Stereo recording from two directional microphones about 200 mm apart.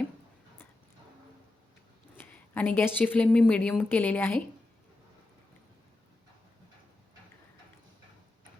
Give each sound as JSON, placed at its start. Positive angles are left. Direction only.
{"t": 2.1, "sound": "a woman's voice", "side_deg": 10}